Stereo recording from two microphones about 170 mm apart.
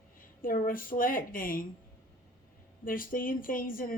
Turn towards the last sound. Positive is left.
turn(degrees=55)  # may be behind; listen again after turning